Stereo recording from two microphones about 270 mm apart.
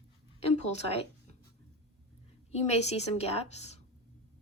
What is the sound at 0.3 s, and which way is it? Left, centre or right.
Speech, left.